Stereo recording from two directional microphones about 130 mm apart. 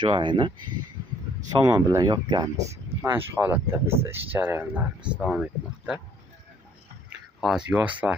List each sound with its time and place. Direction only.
0.0 s speech: 40° right (ahead or behind)
1.6 s speech: 25° right (ahead or behind)
3.0 s speech: 15° right (ahead or behind)
7.4 s speech: 10° right (ahead or behind)